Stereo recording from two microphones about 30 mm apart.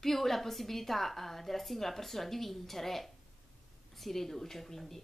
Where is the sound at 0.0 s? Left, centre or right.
Centre.